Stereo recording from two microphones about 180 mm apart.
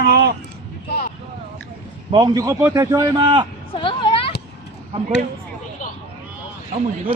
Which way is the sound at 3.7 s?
30° left (ahead or behind).